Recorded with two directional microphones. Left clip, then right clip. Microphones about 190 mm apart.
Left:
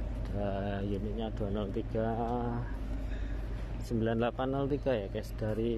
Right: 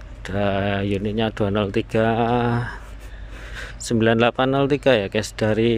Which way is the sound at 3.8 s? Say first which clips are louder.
Right 14 dB; 20° right (ahead or behind).